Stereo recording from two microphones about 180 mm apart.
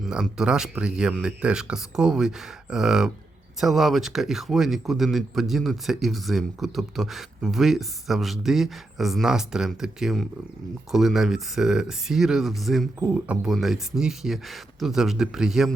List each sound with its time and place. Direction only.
0.0 s speech: 5° right (ahead or behind)